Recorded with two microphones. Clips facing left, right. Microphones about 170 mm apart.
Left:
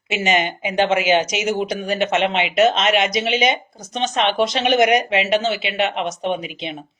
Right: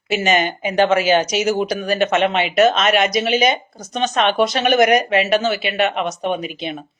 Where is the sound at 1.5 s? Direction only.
25° left (ahead or behind).